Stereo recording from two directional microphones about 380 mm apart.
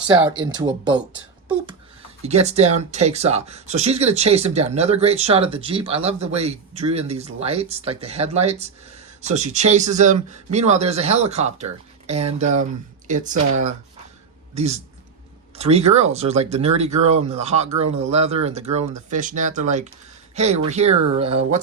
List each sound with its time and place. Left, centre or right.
0.5 s speech: centre
2.2 s speech: centre
14.5 s speech: centre